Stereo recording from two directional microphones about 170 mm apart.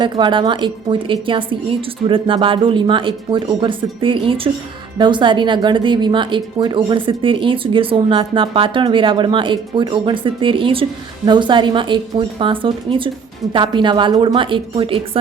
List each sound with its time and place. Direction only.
0.0 s speech: 30° right (ahead or behind)